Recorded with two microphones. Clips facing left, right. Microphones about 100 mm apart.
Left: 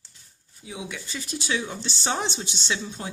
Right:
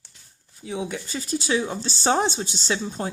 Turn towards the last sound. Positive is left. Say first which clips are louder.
# right 4 dB
turn(degrees=-40)  # may be behind; listen again after turning